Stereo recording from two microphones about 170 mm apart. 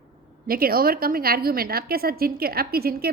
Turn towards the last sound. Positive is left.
turn(degrees=-65)  # may be behind; listen again after turning